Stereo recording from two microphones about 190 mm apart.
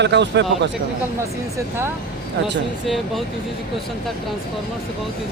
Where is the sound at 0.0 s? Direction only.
65° right (ahead or behind).